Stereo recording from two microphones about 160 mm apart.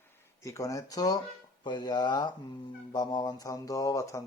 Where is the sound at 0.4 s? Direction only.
20° left (ahead or behind).